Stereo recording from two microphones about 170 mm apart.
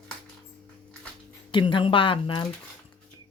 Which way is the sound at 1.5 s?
30° left (ahead or behind).